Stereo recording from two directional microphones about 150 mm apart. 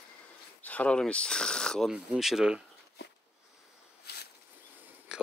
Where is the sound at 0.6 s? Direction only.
10° left (ahead or behind).